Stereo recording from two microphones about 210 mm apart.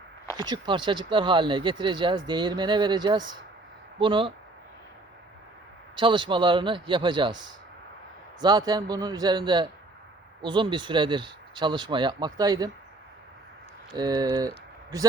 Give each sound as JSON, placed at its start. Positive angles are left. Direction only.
{"t": 0.3, "sound": "speech", "side_deg": -20}
{"t": 6.0, "sound": "speech", "side_deg": -25}
{"t": 13.9, "sound": "speech", "side_deg": -20}
{"t": 14.3, "sound": "a sound", "side_deg": -15}